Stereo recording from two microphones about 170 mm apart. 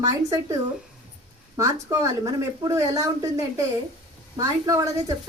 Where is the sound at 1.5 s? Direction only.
20° right (ahead or behind).